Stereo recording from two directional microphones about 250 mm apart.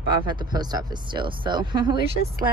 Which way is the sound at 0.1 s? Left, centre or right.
Centre.